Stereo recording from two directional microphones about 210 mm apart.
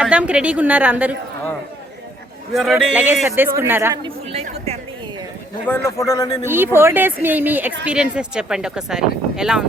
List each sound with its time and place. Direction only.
0.0 s a man's voice: 5° right (ahead or behind)
2.5 s a man's voice: centre (ahead or behind)
4.4 s a woman's voice: 30° right (ahead or behind)
5.6 s a man's voice: 10° left (ahead or behind)
6.4 s a man's voice: 10° right (ahead or behind)